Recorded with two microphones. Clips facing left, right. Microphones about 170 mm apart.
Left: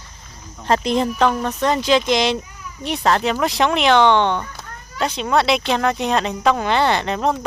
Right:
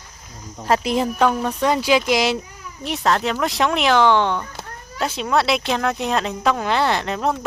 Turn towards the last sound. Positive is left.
turn(degrees=0)  # may be behind; listen again after turning